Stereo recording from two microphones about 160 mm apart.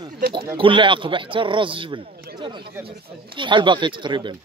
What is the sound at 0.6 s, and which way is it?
A man's voice, 30° right (ahead or behind).